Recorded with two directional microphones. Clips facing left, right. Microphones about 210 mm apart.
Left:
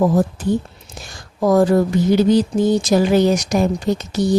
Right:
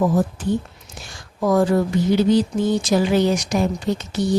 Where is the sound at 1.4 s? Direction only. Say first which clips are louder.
Left 3 dB; 40° left (ahead or behind).